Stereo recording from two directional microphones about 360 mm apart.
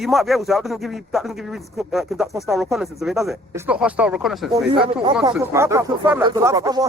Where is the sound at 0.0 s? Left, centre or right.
Centre.